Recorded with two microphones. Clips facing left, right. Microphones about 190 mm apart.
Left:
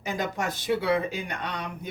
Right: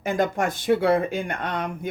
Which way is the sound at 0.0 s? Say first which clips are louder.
Right 6 dB; 50° right (ahead or behind).